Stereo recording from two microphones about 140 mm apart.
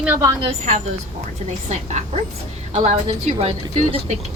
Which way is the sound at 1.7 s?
55° right (ahead or behind).